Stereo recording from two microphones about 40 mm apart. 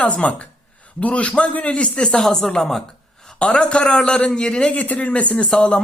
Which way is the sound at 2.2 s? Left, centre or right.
Centre.